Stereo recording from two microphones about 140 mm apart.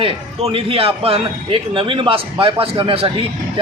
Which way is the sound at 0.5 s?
40° right (ahead or behind).